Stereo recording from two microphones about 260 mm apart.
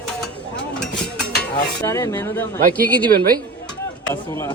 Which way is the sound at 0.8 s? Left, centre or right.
Centre.